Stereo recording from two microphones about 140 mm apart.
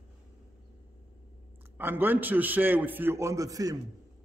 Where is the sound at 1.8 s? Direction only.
15° right (ahead or behind).